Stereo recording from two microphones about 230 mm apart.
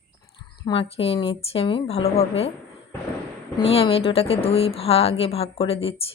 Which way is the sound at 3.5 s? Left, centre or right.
Left.